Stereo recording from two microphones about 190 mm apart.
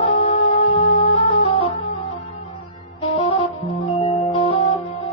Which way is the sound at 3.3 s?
30° left (ahead or behind).